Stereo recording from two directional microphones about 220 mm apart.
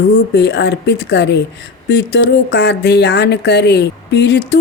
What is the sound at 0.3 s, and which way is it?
Speech, 50° left (ahead or behind).